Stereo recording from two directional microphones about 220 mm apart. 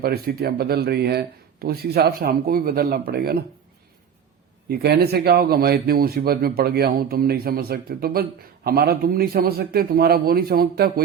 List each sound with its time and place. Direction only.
0.0 s a man's voice: 45° right (ahead or behind)
4.7 s a man's voice: 45° right (ahead or behind)